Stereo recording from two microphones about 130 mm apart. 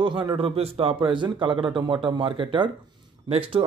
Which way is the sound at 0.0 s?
35° right (ahead or behind).